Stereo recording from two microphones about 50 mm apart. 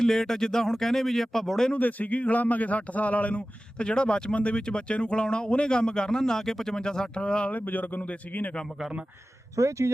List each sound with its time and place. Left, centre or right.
0.0 s speech: centre
1.7 s a man's voice: left
7.5 s speech: left
9.6 s speech: right